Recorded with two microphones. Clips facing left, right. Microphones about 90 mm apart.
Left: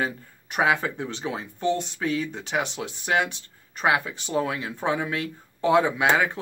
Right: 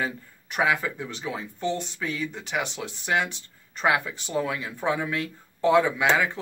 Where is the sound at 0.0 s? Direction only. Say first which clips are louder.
Left 2 dB; 20° left (ahead or behind).